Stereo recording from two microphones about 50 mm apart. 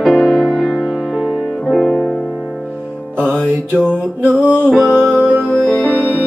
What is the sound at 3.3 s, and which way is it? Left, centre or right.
Music, right.